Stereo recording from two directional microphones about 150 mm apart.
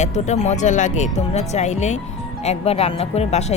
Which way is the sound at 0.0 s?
50° left (ahead or behind).